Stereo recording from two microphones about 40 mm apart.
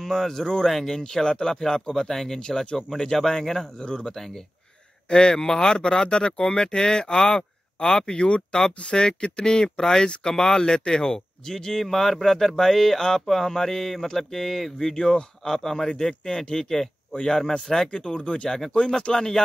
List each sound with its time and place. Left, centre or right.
0.0 s speech: centre
3.8 s speech: left
4.1 s speech: centre
5.1 s speech: left
17.9 s speech: left
19.1 s speech: centre